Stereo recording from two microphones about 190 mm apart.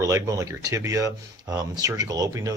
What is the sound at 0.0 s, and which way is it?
Speech, 15° right (ahead or behind).